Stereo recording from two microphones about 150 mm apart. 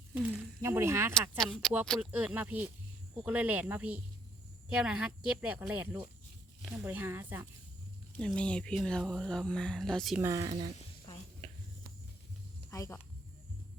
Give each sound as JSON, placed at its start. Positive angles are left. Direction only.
{"t": 0.1, "sound": "speech", "side_deg": -10}
{"t": 1.4, "sound": "speech", "side_deg": 0}
{"t": 2.0, "sound": "speech", "side_deg": -10}
{"t": 8.2, "sound": "speech", "side_deg": 5}
{"t": 10.2, "sound": "speech", "side_deg": -20}
{"t": 12.7, "sound": "speech", "side_deg": 20}